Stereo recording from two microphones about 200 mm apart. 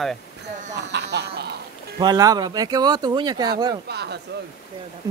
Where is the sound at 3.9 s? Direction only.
55° right (ahead or behind).